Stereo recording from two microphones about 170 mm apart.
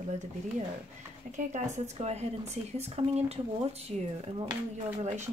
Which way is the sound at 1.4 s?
45° right (ahead or behind).